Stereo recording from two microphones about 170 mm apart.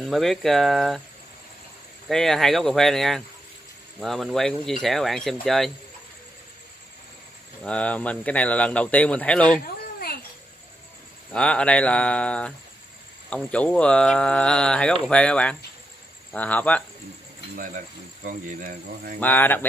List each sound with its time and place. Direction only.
0.0 s speech: centre (ahead or behind)
2.0 s speech: centre (ahead or behind)
7.6 s speech: 5° left (ahead or behind)
9.9 s a sound: 65° left (ahead or behind)
11.3 s speech: 5° left (ahead or behind)
17.6 s speech: 50° right (ahead or behind)
19.1 s speech: 10° left (ahead or behind)